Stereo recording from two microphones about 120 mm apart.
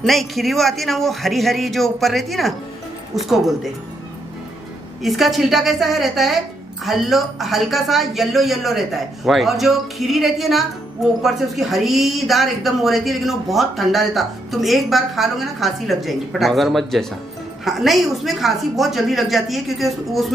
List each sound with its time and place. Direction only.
0.0 s speech: centre (ahead or behind)
5.0 s speech: centre (ahead or behind)